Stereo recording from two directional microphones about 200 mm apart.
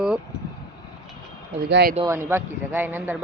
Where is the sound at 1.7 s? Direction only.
55° right (ahead or behind).